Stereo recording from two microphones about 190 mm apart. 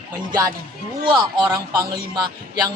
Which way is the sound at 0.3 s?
20° right (ahead or behind).